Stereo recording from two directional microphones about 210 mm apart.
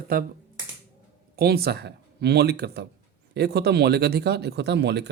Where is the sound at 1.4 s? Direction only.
50° right (ahead or behind).